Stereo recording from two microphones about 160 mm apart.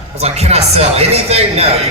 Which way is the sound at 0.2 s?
40° right (ahead or behind).